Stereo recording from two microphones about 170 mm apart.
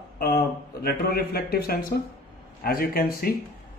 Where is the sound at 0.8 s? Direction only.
65° left (ahead or behind).